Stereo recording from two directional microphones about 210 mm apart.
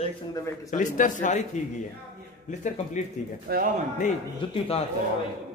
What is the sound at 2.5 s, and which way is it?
Speech, 35° left (ahead or behind).